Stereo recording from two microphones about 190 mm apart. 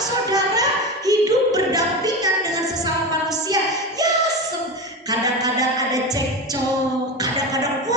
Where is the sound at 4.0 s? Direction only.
20° right (ahead or behind).